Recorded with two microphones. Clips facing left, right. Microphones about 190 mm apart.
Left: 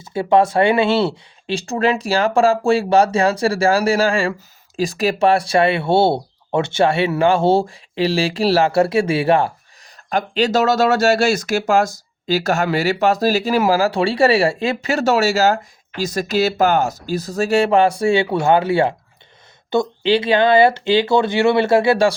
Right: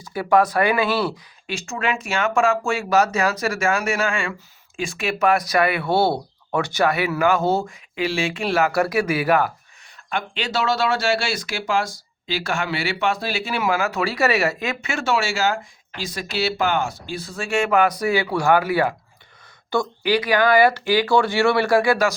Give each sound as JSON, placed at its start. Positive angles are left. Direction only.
{"t": 0.0, "sound": "speech", "side_deg": 25}
{"t": 10.1, "sound": "speech", "side_deg": 40}